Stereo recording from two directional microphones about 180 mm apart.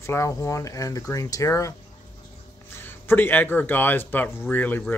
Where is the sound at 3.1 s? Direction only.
10° left (ahead or behind).